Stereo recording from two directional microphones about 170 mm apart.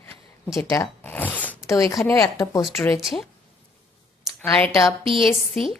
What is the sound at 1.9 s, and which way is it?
A woman's voice, centre (ahead or behind).